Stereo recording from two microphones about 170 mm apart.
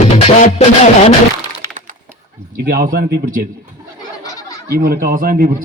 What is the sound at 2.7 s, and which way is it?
Speech, 65° right (ahead or behind).